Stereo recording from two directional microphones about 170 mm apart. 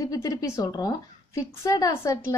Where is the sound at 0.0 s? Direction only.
20° left (ahead or behind).